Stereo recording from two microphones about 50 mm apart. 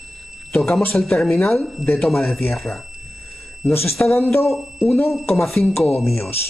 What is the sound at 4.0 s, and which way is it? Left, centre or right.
Speech, left.